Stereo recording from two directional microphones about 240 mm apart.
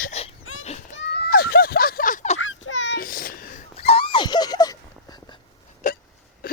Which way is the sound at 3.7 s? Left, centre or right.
Left.